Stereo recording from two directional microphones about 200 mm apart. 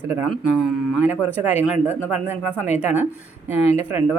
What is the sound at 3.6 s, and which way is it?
Speech, 30° left (ahead or behind).